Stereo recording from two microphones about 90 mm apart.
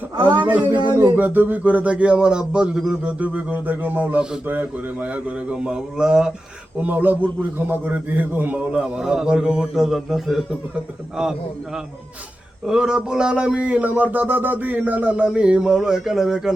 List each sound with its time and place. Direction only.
0.4 s speech: 20° right (ahead or behind)
6.7 s a man's voice: 20° right (ahead or behind); by 16.6 s 5° right (ahead or behind)